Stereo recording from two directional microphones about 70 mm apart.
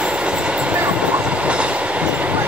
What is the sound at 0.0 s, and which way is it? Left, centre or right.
Train, centre.